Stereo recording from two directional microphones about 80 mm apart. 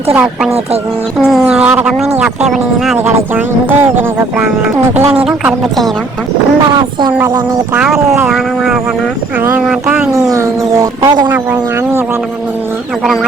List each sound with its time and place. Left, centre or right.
1.2 s speech: centre
1.6 s speech: centre
3.3 s speech: right
5.1 s speech: centre
8.3 s speech: centre
10.2 s speech: right